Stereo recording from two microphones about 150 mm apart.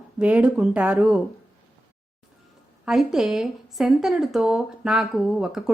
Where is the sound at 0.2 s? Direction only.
10° right (ahead or behind).